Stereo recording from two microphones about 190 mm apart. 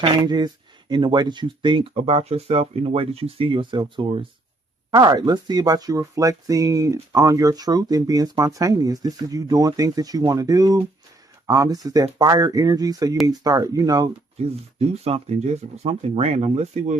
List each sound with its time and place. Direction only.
0.0 s speech: 20° right (ahead or behind)
14.4 s speech: 30° right (ahead or behind)